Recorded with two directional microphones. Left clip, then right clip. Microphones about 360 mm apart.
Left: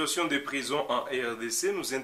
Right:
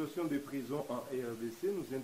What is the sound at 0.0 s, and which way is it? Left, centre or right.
Speech, centre.